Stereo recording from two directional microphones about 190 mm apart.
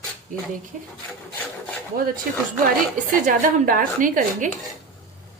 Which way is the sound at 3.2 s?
45° right (ahead or behind).